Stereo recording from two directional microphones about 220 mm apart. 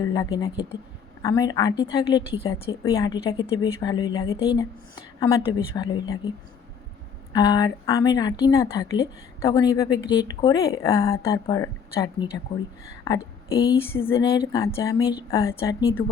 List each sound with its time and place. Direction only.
0.0 s a woman's voice: 15° left (ahead or behind)
7.3 s a woman's voice: 20° left (ahead or behind)